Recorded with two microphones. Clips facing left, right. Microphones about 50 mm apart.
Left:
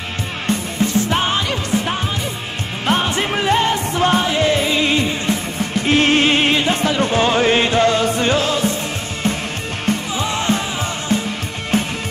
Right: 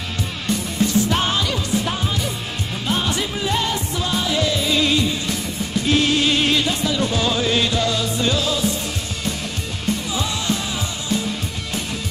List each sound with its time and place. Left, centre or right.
1.1 s music: left
3.1 s music: left
6.8 s music: left
10.1 s music: left